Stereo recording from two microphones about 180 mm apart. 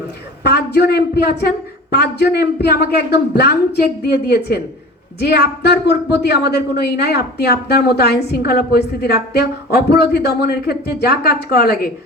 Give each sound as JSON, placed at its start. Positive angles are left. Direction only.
{"t": 0.4, "sound": "a woman's voice", "side_deg": 65}